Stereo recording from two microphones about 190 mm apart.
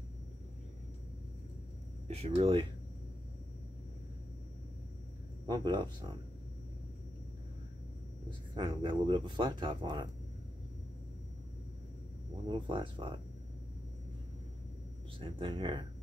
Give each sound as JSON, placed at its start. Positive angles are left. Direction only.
{"t": 2.0, "sound": "speech", "side_deg": -35}
{"t": 5.5, "sound": "speech", "side_deg": -20}
{"t": 8.3, "sound": "speech", "side_deg": -25}
{"t": 12.4, "sound": "speech", "side_deg": -25}
{"t": 15.1, "sound": "speech", "side_deg": -25}